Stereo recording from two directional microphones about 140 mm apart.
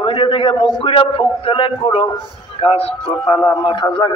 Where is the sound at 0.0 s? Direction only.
40° left (ahead or behind).